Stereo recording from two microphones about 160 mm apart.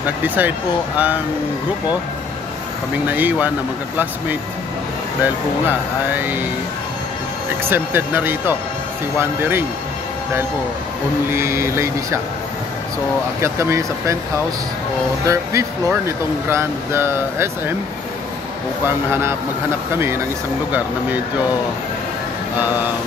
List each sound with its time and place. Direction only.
0.2 s speech: 10° right (ahead or behind)
3.1 s speech: 10° right (ahead or behind)
5.2 s speech: 10° right (ahead or behind)
7.7 s speech: 15° right (ahead or behind)
11.2 s speech: 15° right (ahead or behind)
13.4 s speech: 15° right (ahead or behind)
15.2 s speech: 15° right (ahead or behind)
18.9 s speech: 15° right (ahead or behind)